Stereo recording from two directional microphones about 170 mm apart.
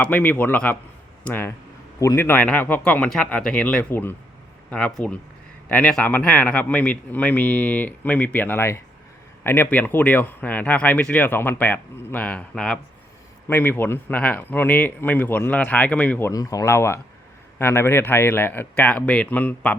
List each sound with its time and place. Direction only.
0.0 s speech: 10° left (ahead or behind)